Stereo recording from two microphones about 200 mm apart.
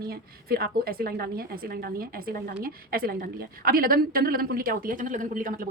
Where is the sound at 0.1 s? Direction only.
50° right (ahead or behind).